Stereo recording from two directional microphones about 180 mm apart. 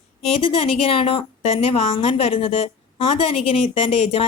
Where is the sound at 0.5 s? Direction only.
30° left (ahead or behind).